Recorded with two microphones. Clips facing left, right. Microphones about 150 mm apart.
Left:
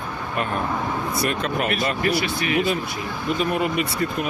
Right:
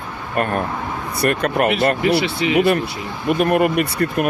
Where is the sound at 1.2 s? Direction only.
55° right (ahead or behind).